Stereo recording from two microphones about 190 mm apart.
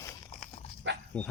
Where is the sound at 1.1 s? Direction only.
5° left (ahead or behind).